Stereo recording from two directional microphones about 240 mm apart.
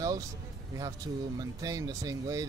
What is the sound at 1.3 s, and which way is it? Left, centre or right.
Speech, centre.